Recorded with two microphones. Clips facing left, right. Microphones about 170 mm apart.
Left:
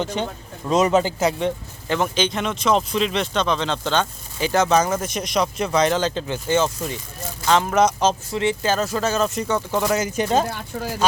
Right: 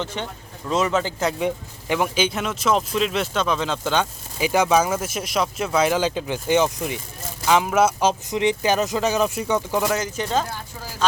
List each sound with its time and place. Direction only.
0.0 s a man's voice: 15° left (ahead or behind)
1.2 s speech: centre (ahead or behind)
1.5 s speech: 10° right (ahead or behind)
8.3 s speech: 15° right (ahead or behind)
9.8 s speech: centre (ahead or behind)